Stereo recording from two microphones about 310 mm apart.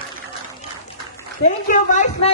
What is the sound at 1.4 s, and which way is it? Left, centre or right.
Speech, left.